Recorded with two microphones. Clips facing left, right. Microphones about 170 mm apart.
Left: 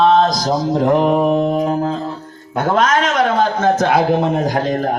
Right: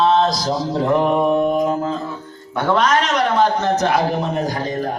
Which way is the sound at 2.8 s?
50° left (ahead or behind).